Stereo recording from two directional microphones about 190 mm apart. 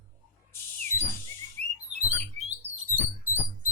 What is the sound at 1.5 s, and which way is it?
Bird, 35° right (ahead or behind).